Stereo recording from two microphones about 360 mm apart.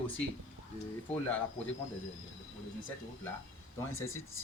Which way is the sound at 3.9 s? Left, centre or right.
Centre.